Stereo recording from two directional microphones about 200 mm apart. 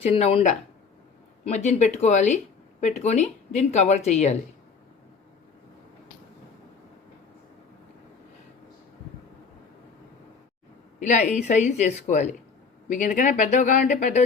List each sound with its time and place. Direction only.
0.0 s a woman's voice: 30° left (ahead or behind)
11.0 s a woman's voice: 35° left (ahead or behind)